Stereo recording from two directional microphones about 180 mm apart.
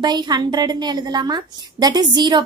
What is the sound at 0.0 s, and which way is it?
A woman's voice, 25° right (ahead or behind).